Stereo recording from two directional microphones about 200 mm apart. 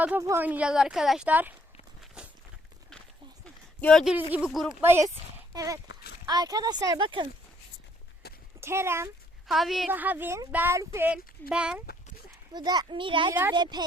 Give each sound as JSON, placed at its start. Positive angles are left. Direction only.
{"t": 0.0, "sound": "speech", "side_deg": -10}
{"t": 2.2, "sound": "walk", "side_deg": -5}
{"t": 3.8, "sound": "speech", "side_deg": 5}
{"t": 5.9, "sound": "a sound", "side_deg": 55}
{"t": 6.2, "sound": "speech", "side_deg": -20}
{"t": 8.2, "sound": "a sound", "side_deg": 55}
{"t": 8.6, "sound": "speech", "side_deg": -15}
{"t": 9.5, "sound": "speech", "side_deg": 0}
{"t": 12.5, "sound": "speech", "side_deg": -20}